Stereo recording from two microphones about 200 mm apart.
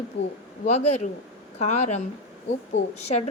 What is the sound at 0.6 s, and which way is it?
A woman's voice, 35° left (ahead or behind).